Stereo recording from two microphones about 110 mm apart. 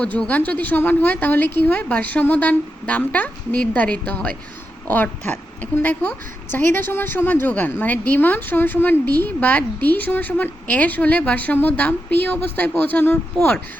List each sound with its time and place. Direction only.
0.0 s a woman's voice: 10° left (ahead or behind)